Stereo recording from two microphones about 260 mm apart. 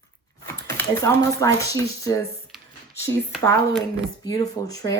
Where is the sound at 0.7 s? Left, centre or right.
Centre.